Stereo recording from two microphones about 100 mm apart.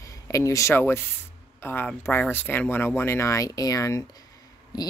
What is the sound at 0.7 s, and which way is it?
Speech, 20° left (ahead or behind).